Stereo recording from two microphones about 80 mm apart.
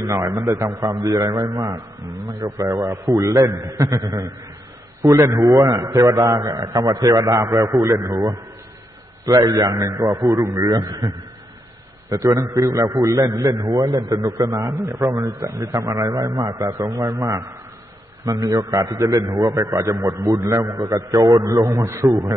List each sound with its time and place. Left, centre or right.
0.0 s a man's voice: right
0.3 s a man's voice: right
12.1 s a man's voice: right